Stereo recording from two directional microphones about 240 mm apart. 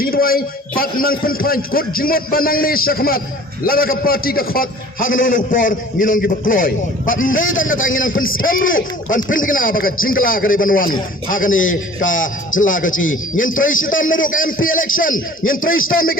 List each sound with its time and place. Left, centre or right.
0.0 s a man's voice: left